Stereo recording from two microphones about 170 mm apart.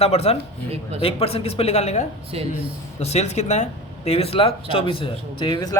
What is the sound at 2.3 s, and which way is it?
Speech, 35° right (ahead or behind).